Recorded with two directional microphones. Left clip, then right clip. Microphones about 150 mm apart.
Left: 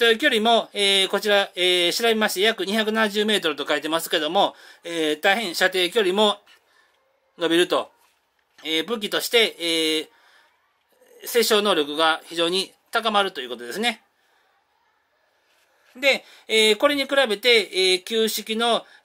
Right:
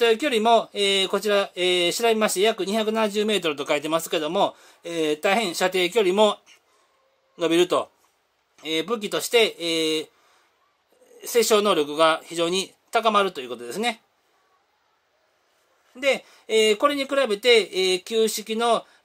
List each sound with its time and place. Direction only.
0.0 s speech: 45° right (ahead or behind)
11.1 s speech: 50° right (ahead or behind)
16.0 s speech: 40° right (ahead or behind)